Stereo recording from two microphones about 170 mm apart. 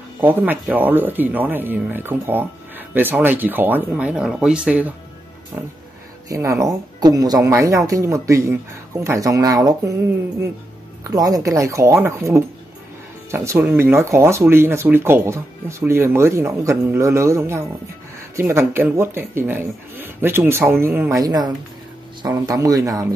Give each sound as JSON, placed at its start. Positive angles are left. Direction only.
{"t": 0.2, "sound": "speech", "side_deg": -10}
{"t": 6.2, "sound": "speech", "side_deg": -20}
{"t": 11.1, "sound": "speech", "side_deg": -20}
{"t": 13.3, "sound": "speech", "side_deg": -15}